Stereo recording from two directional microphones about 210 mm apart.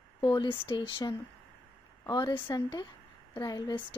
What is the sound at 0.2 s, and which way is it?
Speech, 25° left (ahead or behind).